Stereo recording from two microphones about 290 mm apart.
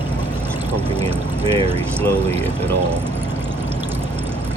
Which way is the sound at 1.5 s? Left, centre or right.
Centre.